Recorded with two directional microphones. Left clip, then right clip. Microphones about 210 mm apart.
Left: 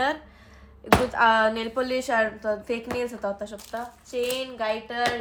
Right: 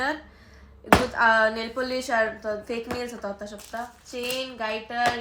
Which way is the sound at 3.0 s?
30° left (ahead or behind).